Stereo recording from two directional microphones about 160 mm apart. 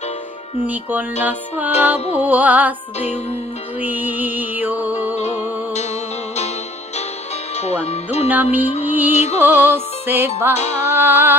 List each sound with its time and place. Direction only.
0.7 s music: 10° right (ahead or behind)
7.6 s speech: 40° left (ahead or behind)
8.3 s music: 10° right (ahead or behind)
9.1 s music: 45° left (ahead or behind)
9.4 s music: 10° right (ahead or behind)
10.5 s speech: 40° left (ahead or behind)
11.0 s music: 15° right (ahead or behind)